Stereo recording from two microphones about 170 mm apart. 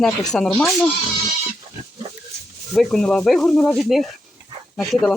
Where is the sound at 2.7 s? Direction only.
Centre (ahead or behind).